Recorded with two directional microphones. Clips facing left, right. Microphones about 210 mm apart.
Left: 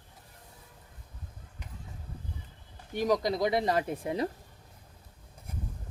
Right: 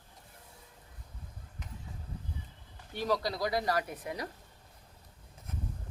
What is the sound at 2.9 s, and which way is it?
Speech, 15° left (ahead or behind).